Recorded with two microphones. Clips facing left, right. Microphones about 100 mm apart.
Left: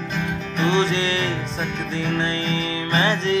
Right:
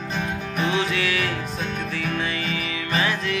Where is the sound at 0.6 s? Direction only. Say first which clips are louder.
Left 4 dB; 25° left (ahead or behind).